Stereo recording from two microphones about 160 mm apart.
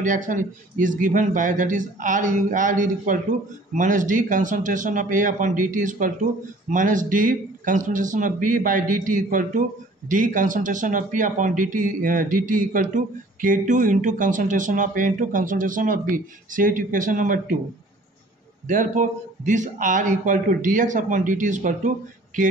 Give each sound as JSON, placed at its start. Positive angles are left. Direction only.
{"t": 0.0, "sound": "a man's voice", "side_deg": -55}
{"t": 18.7, "sound": "speech", "side_deg": -50}